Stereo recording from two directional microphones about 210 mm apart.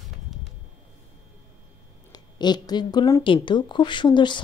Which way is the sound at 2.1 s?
20° left (ahead or behind).